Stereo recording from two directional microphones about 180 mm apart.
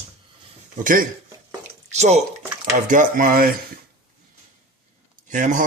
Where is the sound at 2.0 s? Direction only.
40° right (ahead or behind).